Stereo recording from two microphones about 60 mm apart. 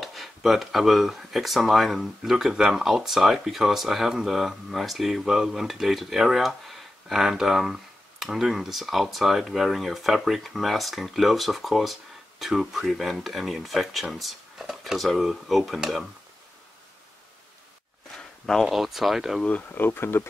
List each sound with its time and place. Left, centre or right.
0.0 s speech: centre
18.1 s a sound: centre
18.7 s speech: centre
19.4 s speech: left